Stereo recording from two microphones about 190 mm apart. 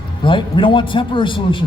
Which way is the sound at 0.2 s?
25° left (ahead or behind).